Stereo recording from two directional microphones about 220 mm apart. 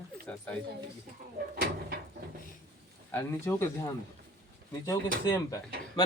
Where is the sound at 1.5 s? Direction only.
45° right (ahead or behind).